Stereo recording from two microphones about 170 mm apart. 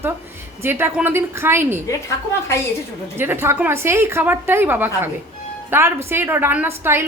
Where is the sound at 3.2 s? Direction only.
15° right (ahead or behind).